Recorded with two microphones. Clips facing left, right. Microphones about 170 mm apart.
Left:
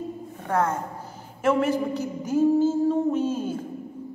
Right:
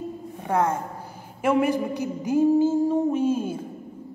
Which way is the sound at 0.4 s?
15° right (ahead or behind).